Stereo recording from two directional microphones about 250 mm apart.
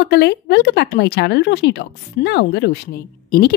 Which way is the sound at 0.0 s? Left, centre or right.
Left.